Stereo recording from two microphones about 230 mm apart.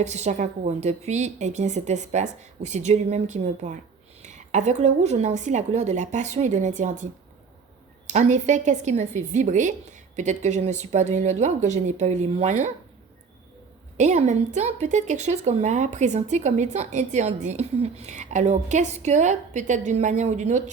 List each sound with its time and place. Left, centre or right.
0.0 s speech: right
13.9 s speech: right